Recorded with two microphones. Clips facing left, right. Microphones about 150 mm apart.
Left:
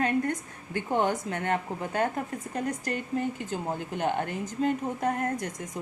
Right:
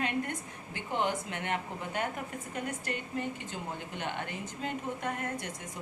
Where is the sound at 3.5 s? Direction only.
45° left (ahead or behind).